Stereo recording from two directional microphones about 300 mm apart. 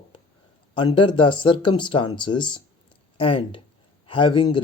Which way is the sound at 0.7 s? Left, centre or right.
Centre.